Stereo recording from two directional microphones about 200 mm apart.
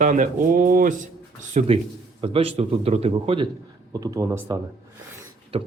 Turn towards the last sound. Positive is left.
turn(degrees=-30)  # may be behind; listen again after turning